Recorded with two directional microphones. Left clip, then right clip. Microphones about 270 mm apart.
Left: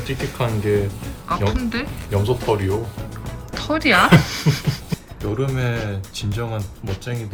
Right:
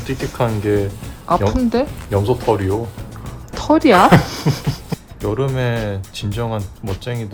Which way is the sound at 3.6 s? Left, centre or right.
Right.